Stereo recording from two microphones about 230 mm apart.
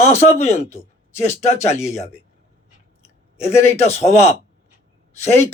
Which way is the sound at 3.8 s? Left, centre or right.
Left.